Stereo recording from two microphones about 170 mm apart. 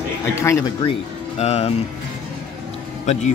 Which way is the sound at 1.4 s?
40° left (ahead or behind).